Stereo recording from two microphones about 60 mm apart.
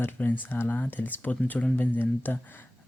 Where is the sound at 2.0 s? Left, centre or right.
Left.